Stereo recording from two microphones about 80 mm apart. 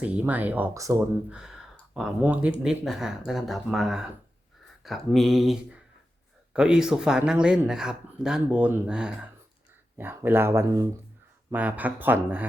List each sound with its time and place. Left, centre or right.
0.0 s speech: centre
0.7 s speech: right
1.3 s a sound: centre
2.2 s speech: centre
2.6 s speech: centre
10.0 s speech: right